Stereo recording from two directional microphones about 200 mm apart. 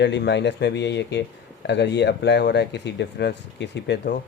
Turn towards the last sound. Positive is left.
turn(degrees=60)  # may be behind; listen again after turning